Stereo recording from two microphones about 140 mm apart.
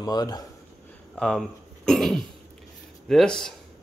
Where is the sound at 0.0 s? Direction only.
30° left (ahead or behind).